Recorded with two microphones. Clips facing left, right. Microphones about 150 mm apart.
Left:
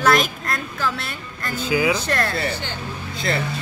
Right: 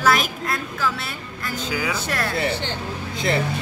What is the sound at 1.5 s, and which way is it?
Speech, 10° left (ahead or behind).